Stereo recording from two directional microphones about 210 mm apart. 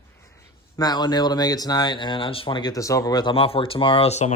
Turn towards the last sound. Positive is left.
turn(degrees=30)  # may be behind; listen again after turning